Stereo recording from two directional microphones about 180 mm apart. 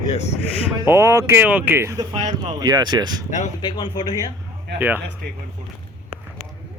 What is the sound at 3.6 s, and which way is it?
Speech, 25° left (ahead or behind).